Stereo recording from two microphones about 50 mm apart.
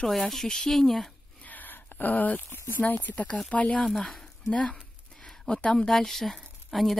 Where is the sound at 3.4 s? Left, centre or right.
Left.